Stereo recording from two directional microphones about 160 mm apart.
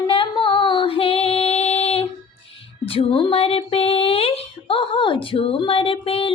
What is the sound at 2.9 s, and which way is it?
Speech, 35° left (ahead or behind).